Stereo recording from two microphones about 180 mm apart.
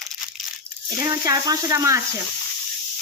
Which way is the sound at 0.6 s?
15° right (ahead or behind).